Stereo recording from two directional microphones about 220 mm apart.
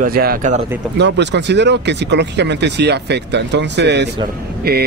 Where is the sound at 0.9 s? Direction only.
50° right (ahead or behind).